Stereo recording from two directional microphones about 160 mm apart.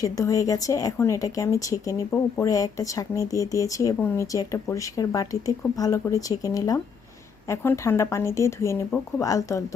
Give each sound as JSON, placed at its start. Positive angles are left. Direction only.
{"t": 0.0, "sound": "speech", "side_deg": 20}